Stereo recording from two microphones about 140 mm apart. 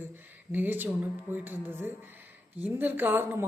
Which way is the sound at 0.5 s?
15° right (ahead or behind).